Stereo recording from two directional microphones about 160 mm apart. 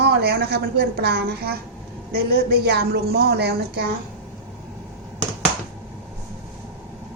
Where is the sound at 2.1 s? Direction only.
80° right.